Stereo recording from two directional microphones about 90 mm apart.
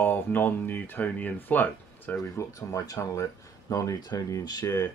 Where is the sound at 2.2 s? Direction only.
40° left (ahead or behind).